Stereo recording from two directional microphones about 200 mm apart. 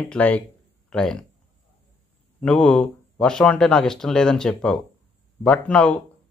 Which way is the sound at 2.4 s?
5° left (ahead or behind).